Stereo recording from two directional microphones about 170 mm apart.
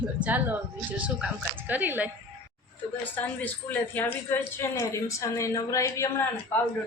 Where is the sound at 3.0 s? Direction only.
10° left (ahead or behind).